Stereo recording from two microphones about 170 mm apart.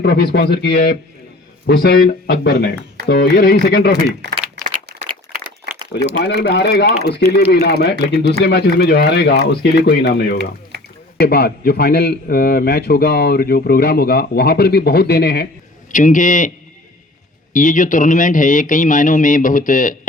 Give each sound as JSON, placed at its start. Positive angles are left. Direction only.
{"t": 0.0, "sound": "a man's voice", "side_deg": 70}
{"t": 4.9, "sound": "crumpling", "side_deg": -25}
{"t": 6.1, "sound": "a man's voice", "side_deg": 85}
{"t": 15.9, "sound": "speech", "side_deg": 50}
{"t": 17.5, "sound": "speech", "side_deg": 50}